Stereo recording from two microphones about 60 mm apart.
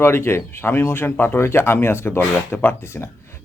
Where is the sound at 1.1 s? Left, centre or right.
Left.